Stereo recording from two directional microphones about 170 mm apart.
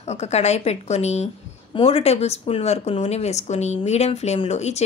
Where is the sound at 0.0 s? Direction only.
40° left (ahead or behind).